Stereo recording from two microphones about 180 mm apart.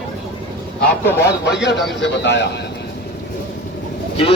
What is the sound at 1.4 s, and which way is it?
A man's voice, 75° left (ahead or behind).